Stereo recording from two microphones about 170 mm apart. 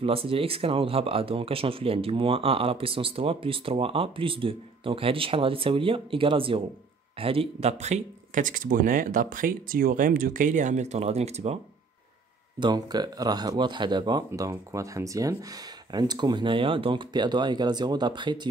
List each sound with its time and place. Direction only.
0.0 s speech: 35° right (ahead or behind)
12.5 s speech: 25° right (ahead or behind)